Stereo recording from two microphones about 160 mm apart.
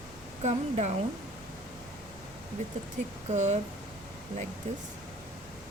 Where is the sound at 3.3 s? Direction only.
45° right (ahead or behind).